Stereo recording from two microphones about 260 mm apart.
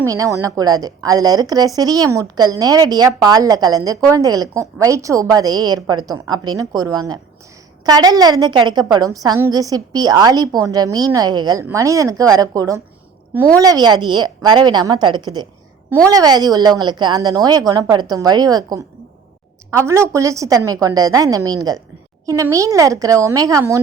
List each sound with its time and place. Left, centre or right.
0.0 s a woman's voice: centre